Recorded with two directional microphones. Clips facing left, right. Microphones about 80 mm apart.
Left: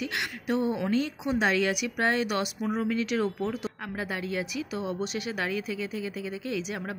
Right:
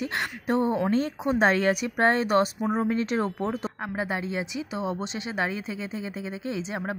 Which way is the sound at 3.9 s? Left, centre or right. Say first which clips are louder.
Right 3 dB; right.